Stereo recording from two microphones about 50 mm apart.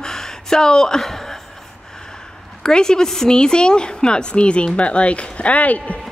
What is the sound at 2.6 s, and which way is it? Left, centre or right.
Speech, centre.